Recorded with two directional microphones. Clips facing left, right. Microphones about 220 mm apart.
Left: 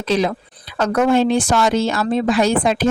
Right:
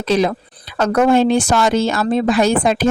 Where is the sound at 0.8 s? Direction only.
45° right (ahead or behind).